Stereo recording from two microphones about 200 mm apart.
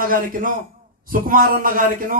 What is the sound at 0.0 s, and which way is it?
A man's voice, 45° right (ahead or behind).